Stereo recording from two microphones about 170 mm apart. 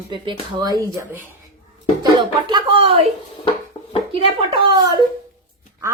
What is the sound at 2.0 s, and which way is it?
Music, 25° right (ahead or behind).